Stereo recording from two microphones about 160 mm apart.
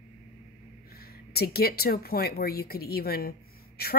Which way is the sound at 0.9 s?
75° left (ahead or behind).